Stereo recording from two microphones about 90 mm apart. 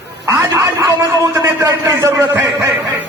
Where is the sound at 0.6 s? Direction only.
40° right (ahead or behind).